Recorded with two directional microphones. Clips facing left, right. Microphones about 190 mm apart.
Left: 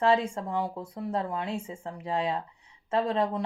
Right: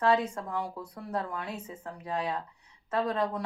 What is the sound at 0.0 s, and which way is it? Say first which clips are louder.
Speech: left 2 dB; 30° left (ahead or behind).